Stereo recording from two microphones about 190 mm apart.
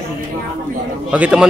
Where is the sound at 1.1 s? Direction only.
5° right (ahead or behind).